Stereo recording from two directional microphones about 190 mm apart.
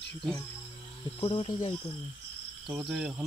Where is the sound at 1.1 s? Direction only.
30° left (ahead or behind).